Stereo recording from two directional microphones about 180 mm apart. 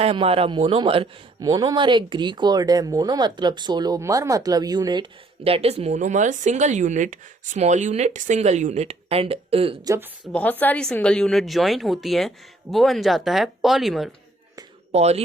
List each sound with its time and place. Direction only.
0.0 s speech: 35° right (ahead or behind)
9.8 s speech: 15° right (ahead or behind)
10.3 s speech: 10° left (ahead or behind)
14.9 s speech: 35° right (ahead or behind)